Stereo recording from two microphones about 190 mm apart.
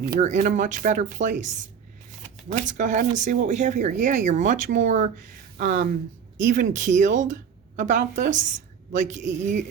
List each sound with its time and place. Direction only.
0.2 s a woman's voice: 40° right (ahead or behind)